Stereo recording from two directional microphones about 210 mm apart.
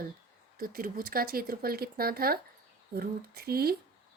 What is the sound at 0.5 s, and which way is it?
Speech, 45° right (ahead or behind).